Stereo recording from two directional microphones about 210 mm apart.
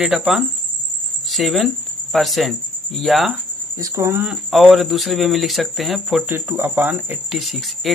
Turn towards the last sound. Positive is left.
turn(degrees=0)  # may be behind; listen again after turning